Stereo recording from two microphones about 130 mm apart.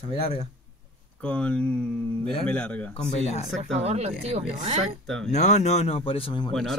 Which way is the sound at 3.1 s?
55° left (ahead or behind).